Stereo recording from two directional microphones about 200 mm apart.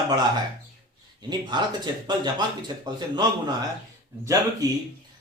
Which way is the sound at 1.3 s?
20° right (ahead or behind).